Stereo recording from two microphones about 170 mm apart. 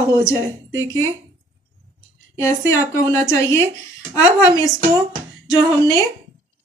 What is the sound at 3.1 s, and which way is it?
Speech, 15° left (ahead or behind).